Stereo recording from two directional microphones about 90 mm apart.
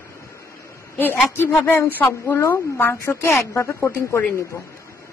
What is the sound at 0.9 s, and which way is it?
A woman's voice, 25° left (ahead or behind).